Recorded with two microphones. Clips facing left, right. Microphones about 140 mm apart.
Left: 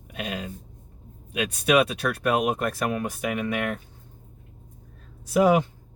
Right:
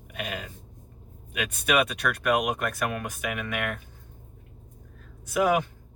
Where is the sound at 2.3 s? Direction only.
30° left (ahead or behind).